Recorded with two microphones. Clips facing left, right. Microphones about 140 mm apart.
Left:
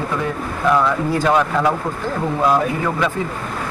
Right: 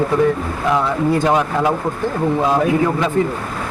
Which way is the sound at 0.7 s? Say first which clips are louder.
Right 1 dB; 20° right (ahead or behind).